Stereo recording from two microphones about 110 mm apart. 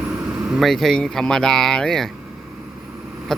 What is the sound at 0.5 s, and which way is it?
Speech, centre (ahead or behind).